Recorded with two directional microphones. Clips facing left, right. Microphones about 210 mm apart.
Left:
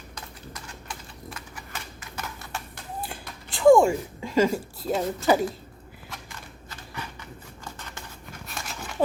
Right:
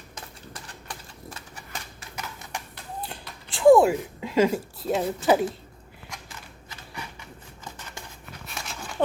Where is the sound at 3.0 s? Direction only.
Centre (ahead or behind).